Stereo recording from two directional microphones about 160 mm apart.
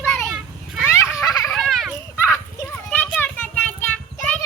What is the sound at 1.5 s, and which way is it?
Children playing, centre (ahead or behind).